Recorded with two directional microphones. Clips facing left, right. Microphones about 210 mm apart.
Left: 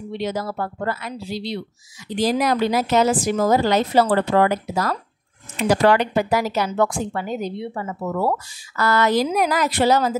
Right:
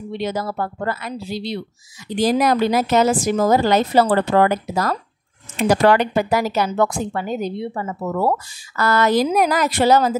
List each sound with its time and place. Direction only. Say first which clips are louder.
0.2 s a woman's voice: right 1 dB; 45° right (ahead or behind)